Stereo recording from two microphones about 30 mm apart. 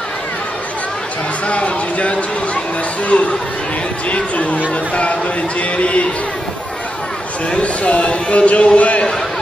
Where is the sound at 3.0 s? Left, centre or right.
Left.